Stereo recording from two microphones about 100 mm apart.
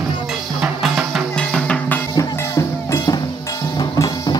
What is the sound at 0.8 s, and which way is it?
Music, 5° right (ahead or behind).